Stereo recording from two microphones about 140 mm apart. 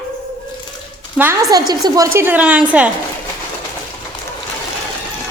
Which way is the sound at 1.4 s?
25° right (ahead or behind).